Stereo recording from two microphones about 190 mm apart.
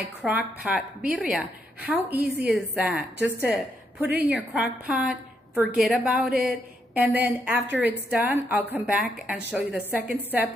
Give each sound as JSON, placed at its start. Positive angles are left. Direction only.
{"t": 0.2, "sound": "a woman's voice", "side_deg": -5}